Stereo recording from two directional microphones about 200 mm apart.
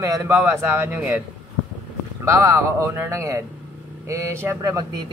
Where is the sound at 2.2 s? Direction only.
15° right (ahead or behind).